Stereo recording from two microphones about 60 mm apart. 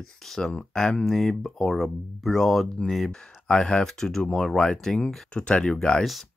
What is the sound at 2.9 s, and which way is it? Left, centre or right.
Speech, centre.